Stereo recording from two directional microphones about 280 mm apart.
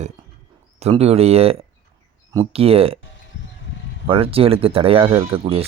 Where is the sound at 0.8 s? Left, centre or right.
Right.